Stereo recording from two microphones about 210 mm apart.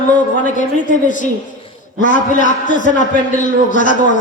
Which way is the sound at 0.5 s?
35° left (ahead or behind).